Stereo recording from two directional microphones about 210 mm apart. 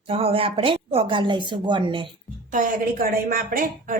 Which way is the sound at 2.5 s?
40° right (ahead or behind).